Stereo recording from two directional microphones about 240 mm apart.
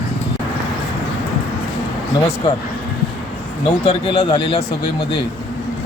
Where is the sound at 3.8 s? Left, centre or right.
Left.